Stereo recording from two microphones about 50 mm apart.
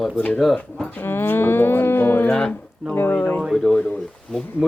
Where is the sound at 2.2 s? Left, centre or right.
Left.